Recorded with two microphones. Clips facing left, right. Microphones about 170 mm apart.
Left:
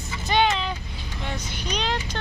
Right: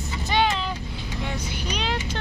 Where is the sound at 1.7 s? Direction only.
5° right (ahead or behind).